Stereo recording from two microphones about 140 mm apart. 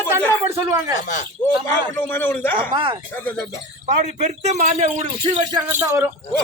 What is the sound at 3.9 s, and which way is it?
A man's voice, 55° right (ahead or behind).